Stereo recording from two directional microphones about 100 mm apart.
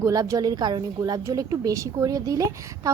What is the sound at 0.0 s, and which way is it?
A woman's voice, 35° right (ahead or behind).